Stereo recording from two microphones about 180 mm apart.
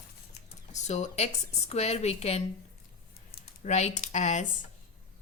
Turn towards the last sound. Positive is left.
turn(degrees=40)  # may be behind; listen again after turning